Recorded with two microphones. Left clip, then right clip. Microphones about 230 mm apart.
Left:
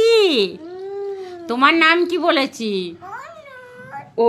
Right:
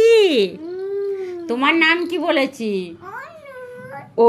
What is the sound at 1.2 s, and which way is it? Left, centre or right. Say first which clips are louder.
A woman's voice: left 5 dB; centre.